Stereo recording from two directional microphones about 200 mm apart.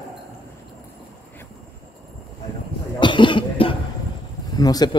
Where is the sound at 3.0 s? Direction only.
25° left (ahead or behind).